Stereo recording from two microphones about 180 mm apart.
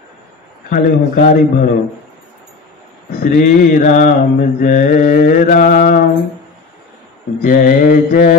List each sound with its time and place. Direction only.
0.7 s mantra: 50° left (ahead or behind)
3.1 s mantra: 50° left (ahead or behind)
7.4 s mantra: 50° left (ahead or behind)